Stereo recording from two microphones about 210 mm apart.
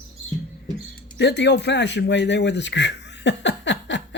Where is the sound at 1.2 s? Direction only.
55° left (ahead or behind).